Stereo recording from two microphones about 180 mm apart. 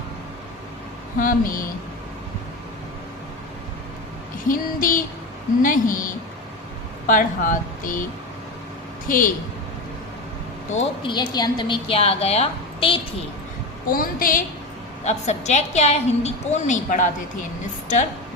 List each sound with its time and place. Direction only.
1.2 s a woman's voice: 50° left (ahead or behind)
4.4 s a woman's voice: 50° left (ahead or behind)
9.0 s a woman's voice: 50° left (ahead or behind)
10.8 s a woman's voice: 25° left (ahead or behind)
13.9 s a woman's voice: 50° left (ahead or behind)
15.0 s a woman's voice: 40° left (ahead or behind)